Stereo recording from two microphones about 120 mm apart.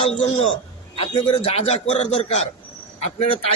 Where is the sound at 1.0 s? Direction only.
45° left (ahead or behind).